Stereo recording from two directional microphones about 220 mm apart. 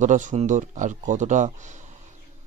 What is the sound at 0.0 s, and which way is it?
Speech, 35° right (ahead or behind).